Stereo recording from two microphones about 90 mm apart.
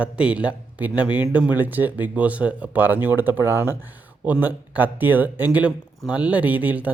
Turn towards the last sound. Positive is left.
turn(degrees=-15)  # may be behind; listen again after turning